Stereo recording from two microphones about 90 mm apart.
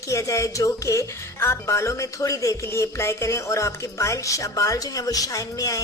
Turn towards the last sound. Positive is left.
turn(degrees=40)  # may be behind; listen again after turning